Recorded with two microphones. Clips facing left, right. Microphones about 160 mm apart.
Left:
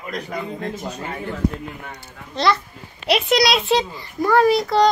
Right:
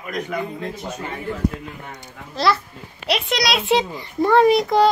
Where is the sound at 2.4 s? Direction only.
5° right (ahead or behind).